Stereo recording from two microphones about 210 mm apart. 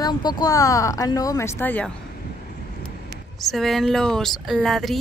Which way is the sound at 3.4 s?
Centre (ahead or behind).